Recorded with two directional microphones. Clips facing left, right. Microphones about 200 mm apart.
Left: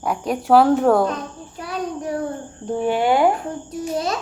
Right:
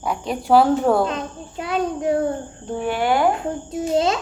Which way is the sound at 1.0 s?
25° right (ahead or behind).